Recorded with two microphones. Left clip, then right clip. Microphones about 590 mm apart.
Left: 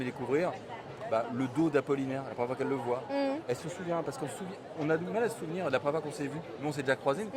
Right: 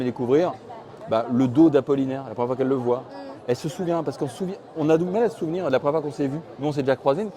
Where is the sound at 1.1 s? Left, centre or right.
Right.